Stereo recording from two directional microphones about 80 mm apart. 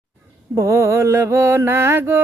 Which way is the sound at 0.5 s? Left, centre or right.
Right.